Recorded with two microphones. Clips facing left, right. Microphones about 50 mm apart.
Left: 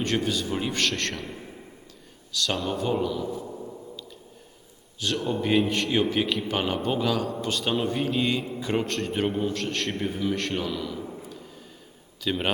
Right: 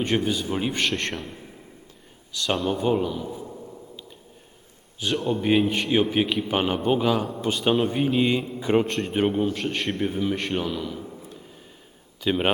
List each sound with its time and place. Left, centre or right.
0.0 s a man's voice: centre
1.1 s a man's voice: centre
2.3 s a man's voice: centre
5.1 s a man's voice: centre
12.2 s speech: centre